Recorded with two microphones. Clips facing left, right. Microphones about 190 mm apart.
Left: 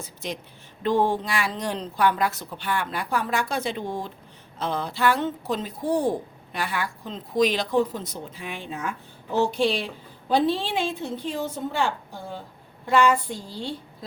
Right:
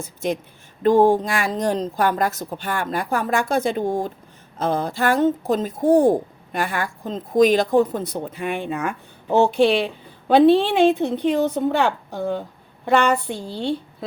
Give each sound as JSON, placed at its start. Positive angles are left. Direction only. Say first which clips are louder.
{"t": 0.0, "sound": "a woman's voice", "louder": "right 9 dB", "side_deg": -50}